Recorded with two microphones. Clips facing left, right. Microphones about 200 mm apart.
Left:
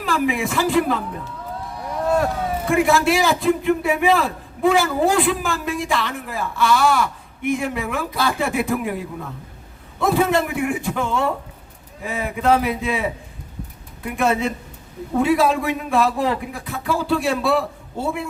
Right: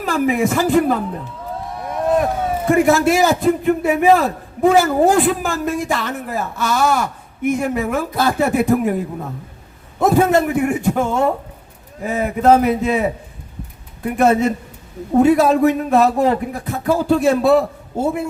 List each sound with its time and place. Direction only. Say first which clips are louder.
0.0 s a man's voice: right 4 dB; 45° right (ahead or behind)
1.8 s a sound: right 3 dB; 20° right (ahead or behind)
2.6 s a man's voice: right 4 dB; 45° right (ahead or behind)